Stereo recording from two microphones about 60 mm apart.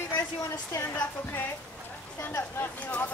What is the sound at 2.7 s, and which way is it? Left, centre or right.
Speech, left.